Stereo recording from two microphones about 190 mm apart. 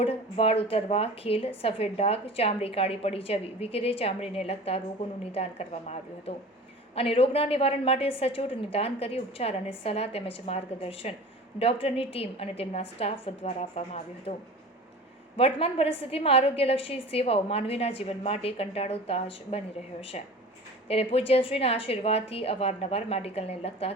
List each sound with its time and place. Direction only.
0.0 s a woman's voice: 30° left (ahead or behind)
15.4 s a woman's voice: 30° left (ahead or behind)